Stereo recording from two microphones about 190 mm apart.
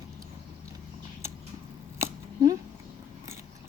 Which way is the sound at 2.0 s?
15° right (ahead or behind).